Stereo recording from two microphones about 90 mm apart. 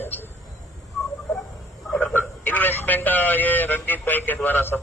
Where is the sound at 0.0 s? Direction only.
25° left (ahead or behind).